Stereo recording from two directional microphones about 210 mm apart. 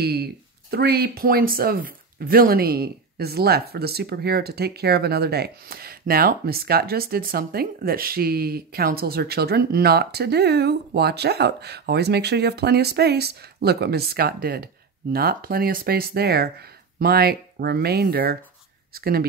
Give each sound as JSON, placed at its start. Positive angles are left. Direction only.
{"t": 0.0, "sound": "speech", "side_deg": -50}